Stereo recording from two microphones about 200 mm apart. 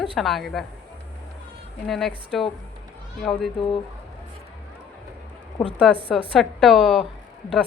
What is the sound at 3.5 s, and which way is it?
Speech, 25° left (ahead or behind).